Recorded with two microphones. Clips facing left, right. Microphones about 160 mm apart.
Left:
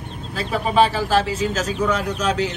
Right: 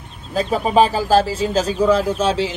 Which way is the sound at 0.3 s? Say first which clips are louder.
Right 5 dB; 40° right (ahead or behind).